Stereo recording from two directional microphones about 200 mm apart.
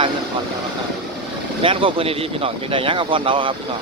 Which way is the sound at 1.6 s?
25° right (ahead or behind).